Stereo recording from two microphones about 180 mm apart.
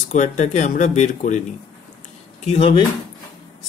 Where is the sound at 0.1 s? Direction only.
40° left (ahead or behind).